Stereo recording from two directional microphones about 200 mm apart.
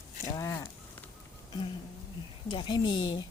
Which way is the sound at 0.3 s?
15° left (ahead or behind).